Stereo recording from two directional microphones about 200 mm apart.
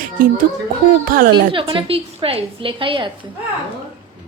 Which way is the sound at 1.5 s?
25° right (ahead or behind).